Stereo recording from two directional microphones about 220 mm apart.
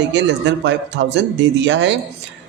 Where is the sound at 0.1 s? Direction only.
55° right (ahead or behind).